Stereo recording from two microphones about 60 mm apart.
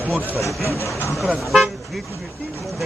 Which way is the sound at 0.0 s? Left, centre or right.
Right.